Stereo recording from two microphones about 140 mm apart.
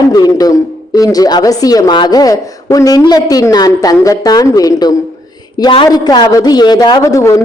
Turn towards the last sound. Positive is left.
turn(degrees=20)  # may be behind; listen again after turning